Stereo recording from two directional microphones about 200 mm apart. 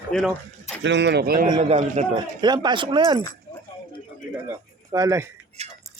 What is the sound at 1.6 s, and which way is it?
Speech, 35° right (ahead or behind).